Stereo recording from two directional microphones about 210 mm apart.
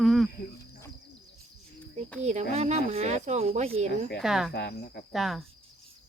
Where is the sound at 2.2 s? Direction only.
30° right (ahead or behind).